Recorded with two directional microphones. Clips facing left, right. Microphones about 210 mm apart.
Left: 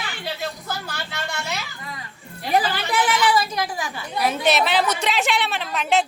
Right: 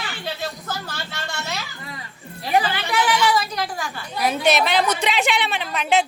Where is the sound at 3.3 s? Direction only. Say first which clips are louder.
Left 1 dB; 5° left (ahead or behind).